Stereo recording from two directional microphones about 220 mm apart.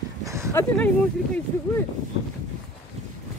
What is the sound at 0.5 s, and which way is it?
Speech, 5° left (ahead or behind).